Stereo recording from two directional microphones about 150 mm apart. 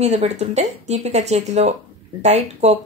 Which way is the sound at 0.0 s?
50° right (ahead or behind).